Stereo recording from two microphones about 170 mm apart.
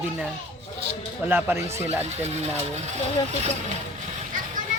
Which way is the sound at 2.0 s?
40° right (ahead or behind).